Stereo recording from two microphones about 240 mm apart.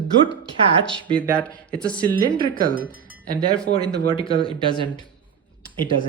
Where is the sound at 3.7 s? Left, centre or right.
Right.